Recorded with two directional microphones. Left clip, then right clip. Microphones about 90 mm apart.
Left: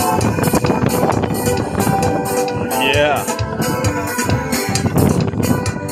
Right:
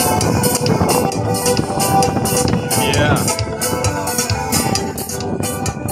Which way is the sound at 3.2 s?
30° right (ahead or behind).